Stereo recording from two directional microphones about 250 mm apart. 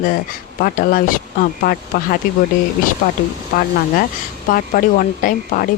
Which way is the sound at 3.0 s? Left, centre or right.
Left.